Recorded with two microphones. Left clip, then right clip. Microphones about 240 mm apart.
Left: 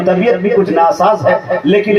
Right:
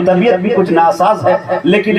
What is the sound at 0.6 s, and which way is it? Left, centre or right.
Speech, right.